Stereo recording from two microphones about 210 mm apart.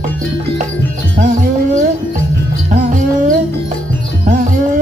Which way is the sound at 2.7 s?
40° right (ahead or behind).